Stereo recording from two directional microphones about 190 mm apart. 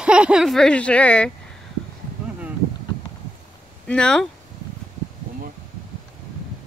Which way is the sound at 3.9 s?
5° left (ahead or behind).